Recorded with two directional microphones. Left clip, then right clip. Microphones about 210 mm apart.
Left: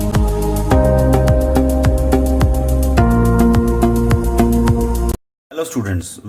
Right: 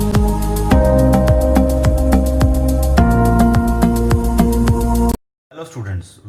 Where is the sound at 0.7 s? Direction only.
Centre (ahead or behind).